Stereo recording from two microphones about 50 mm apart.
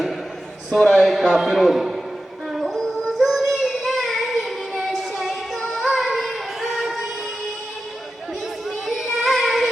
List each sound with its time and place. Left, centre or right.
0.9 s a man's voice: centre
2.5 s music: centre
3.1 s child singing: centre
5.5 s music: centre
6.0 s a sound: centre
6.7 s music: centre
8.7 s child singing: centre